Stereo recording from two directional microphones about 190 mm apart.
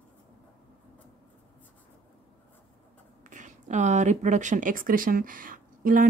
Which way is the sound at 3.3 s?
40° right (ahead or behind).